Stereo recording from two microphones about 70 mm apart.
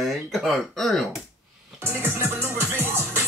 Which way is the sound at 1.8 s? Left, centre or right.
Right.